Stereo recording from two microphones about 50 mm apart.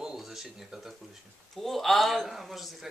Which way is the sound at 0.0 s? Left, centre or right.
Centre.